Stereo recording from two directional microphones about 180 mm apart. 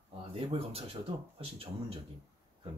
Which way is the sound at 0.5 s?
30° right (ahead or behind).